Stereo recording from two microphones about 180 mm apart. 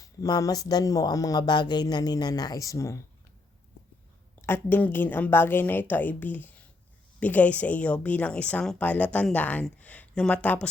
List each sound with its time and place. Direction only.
0.0 s speech: 20° left (ahead or behind)
4.4 s a woman's voice: 10° left (ahead or behind)